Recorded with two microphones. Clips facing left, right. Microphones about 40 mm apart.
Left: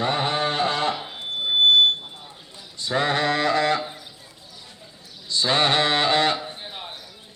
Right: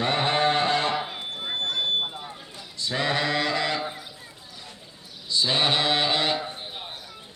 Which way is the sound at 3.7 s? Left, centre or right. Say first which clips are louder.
Left 2 dB; centre.